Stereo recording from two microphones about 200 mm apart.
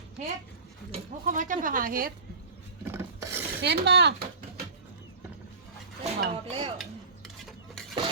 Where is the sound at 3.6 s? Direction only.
55° right (ahead or behind).